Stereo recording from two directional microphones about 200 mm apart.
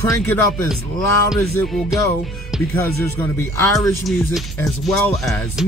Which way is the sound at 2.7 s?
15° left (ahead or behind).